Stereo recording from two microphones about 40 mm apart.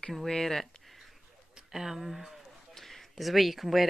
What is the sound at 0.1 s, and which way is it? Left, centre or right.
Speech, centre.